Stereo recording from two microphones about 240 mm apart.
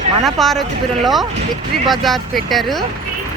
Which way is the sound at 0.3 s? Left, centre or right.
Centre.